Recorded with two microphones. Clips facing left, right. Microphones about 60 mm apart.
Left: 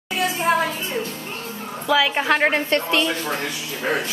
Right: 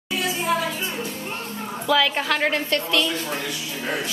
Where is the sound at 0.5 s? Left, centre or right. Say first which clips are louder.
Left 4 dB; left.